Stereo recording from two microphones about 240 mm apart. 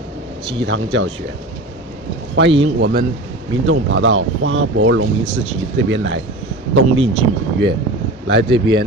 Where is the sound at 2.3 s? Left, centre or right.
Right.